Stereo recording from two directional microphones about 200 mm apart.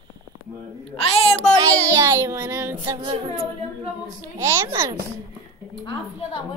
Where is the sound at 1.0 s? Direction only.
30° left (ahead or behind).